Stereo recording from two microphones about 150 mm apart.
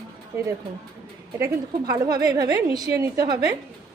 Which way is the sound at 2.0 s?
25° right (ahead or behind).